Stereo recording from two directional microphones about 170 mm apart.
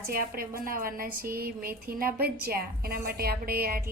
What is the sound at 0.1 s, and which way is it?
Speech, 60° right (ahead or behind).